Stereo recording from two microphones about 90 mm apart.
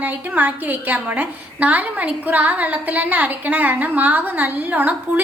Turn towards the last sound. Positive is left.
turn(degrees=-20)  # may be behind; listen again after turning